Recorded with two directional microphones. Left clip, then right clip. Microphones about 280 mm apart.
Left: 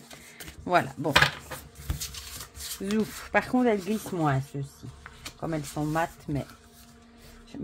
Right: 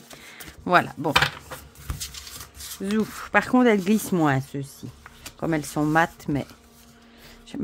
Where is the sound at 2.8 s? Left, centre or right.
Centre; by 4.6 s right.